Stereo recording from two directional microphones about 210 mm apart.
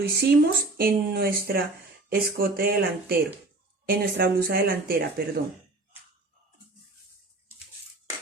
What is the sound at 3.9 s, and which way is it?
A woman's voice, 45° right (ahead or behind).